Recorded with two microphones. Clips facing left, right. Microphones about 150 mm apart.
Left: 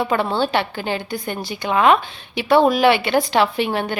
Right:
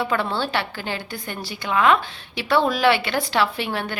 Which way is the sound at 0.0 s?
20° left (ahead or behind).